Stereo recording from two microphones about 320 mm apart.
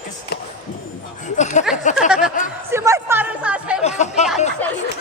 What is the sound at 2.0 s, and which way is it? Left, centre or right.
Speech, centre.